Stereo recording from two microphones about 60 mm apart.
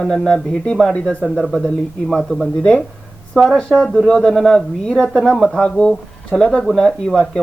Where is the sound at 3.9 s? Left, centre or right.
Centre.